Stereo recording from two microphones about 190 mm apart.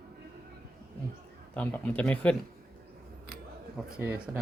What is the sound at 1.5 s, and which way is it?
Speech, 5° left (ahead or behind).